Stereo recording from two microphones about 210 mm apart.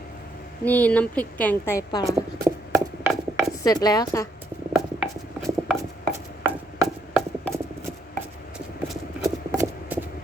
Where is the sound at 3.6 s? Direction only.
15° left (ahead or behind).